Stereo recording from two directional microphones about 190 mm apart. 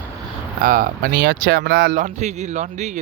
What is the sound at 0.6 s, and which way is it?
Speech, 45° right (ahead or behind).